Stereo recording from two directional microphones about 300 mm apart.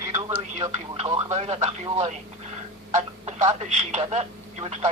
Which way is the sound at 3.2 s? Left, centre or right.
Right.